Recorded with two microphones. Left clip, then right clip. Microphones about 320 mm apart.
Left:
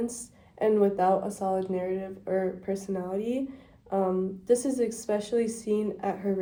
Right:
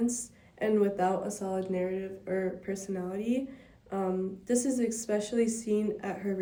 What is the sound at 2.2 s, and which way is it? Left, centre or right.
Speech, centre.